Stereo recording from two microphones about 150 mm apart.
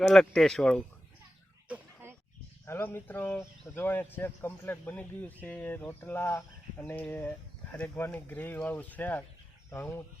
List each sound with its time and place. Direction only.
0.1 s speech: centre (ahead or behind)
1.6 s chicken: 10° right (ahead or behind)
2.6 s speech: 15° left (ahead or behind)